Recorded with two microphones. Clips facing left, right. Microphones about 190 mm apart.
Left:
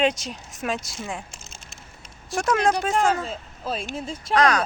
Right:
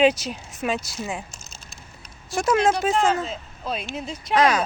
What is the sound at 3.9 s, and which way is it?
Speech, 30° left (ahead or behind).